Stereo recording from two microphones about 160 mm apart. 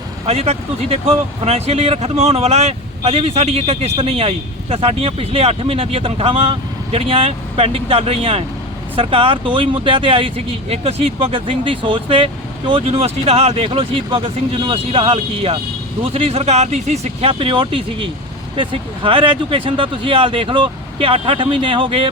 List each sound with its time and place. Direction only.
0.3 s speech: 40° right (ahead or behind)